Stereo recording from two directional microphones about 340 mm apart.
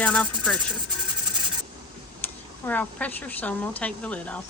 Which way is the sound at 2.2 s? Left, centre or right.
Centre.